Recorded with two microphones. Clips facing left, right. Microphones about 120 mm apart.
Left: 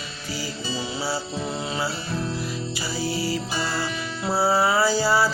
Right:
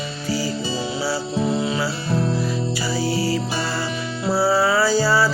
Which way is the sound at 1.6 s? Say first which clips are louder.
Right 5 dB; 30° left (ahead or behind).